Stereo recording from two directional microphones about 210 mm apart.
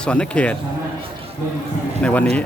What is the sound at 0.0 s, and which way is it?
Speech, 5° left (ahead or behind).